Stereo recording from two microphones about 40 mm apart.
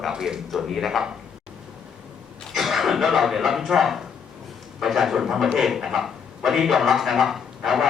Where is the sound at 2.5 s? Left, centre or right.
Centre.